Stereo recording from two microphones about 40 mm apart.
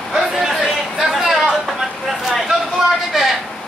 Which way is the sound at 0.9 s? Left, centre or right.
Centre.